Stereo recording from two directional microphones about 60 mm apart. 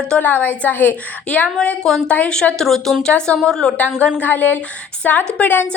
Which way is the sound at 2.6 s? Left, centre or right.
Centre.